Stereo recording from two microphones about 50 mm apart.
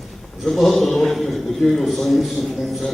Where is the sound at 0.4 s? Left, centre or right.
Centre.